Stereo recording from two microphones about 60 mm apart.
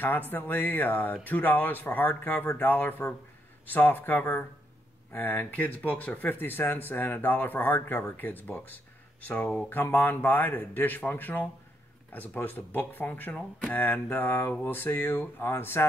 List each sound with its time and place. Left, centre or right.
0.0 s speech: left
9.8 s speech: left